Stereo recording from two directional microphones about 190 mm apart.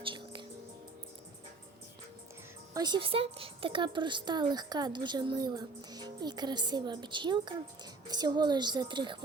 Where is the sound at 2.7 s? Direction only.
20° right (ahead or behind).